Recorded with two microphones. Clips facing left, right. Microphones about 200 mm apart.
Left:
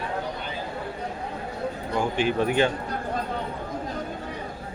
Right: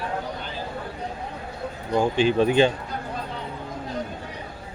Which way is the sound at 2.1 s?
25° right (ahead or behind).